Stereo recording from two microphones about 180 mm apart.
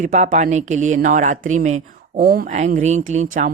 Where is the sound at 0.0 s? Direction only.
45° right (ahead or behind).